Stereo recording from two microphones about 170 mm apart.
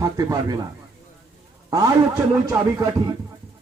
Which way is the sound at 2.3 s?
15° right (ahead or behind).